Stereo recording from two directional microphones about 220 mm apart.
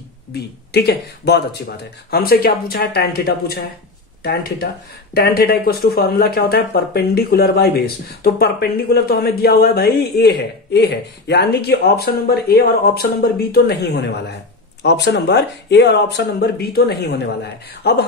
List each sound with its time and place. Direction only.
0.3 s speech: 45° left (ahead or behind)